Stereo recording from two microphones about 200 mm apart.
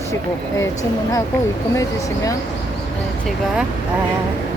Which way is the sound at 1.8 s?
15° left (ahead or behind).